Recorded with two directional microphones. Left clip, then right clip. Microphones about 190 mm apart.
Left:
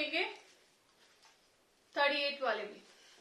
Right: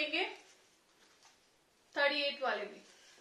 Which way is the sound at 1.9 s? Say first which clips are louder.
Even; 10° left (ahead or behind).